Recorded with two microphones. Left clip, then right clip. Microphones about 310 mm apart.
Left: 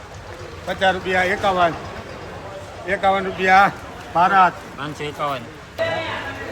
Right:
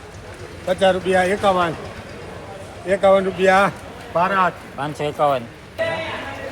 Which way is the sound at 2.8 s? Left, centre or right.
Centre.